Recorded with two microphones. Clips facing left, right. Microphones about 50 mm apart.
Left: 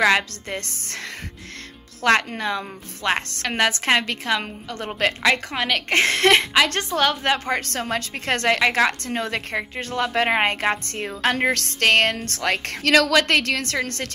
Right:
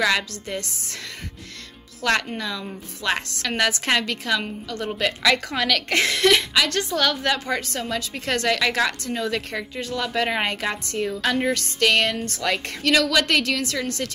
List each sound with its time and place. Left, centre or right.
0.0 s a woman's voice: left
2.0 s a woman's voice: left
7.0 s a woman's voice: left
7.3 s a woman's voice: left
7.6 s a woman's voice: left
11.3 s speech: left